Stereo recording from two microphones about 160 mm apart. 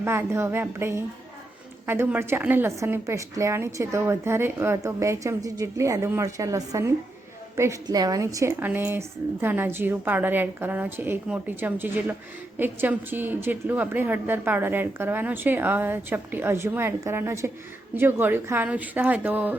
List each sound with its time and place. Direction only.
0.0 s a woman's voice: 15° right (ahead or behind)